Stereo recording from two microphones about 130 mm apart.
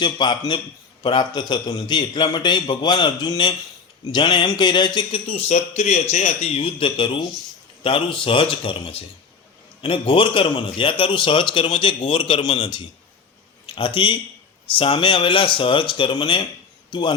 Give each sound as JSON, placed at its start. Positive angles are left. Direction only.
{"t": 0.0, "sound": "a man's voice", "side_deg": 35}